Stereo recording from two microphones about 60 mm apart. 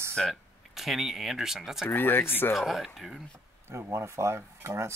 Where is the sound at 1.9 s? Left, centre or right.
Left.